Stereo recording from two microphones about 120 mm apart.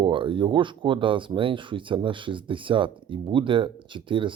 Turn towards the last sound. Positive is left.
turn(degrees=-45)  # may be behind; listen again after turning